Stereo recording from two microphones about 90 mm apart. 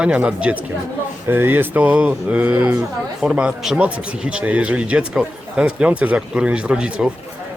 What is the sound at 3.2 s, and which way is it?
Speech, 10° right (ahead or behind).